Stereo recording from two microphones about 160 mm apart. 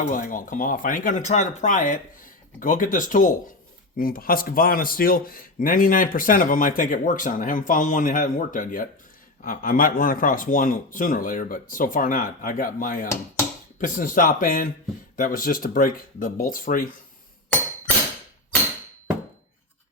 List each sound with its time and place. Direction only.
0.0 s speech: 55° left (ahead or behind)